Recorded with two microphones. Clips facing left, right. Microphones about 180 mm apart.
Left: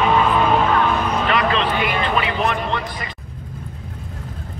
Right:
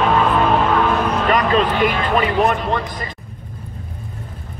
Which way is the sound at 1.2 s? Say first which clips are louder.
Right 5 dB; 45° right (ahead or behind).